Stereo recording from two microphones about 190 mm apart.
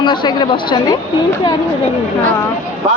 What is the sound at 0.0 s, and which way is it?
Speech, 25° left (ahead or behind).